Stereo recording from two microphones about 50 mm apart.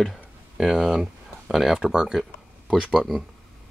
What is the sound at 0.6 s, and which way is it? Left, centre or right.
Speech, centre.